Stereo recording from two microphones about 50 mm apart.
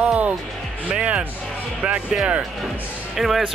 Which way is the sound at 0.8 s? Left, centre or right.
Right.